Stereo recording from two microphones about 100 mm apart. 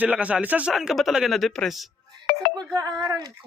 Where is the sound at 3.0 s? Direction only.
40° right (ahead or behind).